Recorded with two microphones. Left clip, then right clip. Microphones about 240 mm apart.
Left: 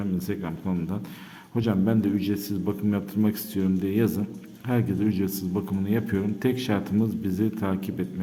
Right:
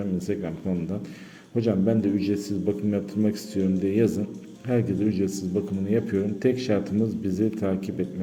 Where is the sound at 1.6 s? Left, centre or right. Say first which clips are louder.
Right 2 dB; centre.